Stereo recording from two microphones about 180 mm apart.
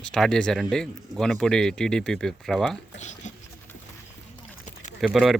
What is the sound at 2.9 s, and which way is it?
Speech, 40° left (ahead or behind).